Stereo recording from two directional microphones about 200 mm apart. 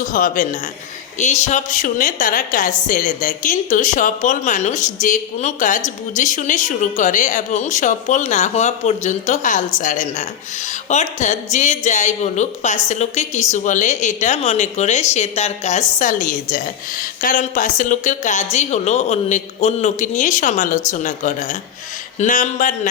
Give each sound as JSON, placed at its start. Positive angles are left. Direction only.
{"t": 0.1, "sound": "a woman's voice", "side_deg": 45}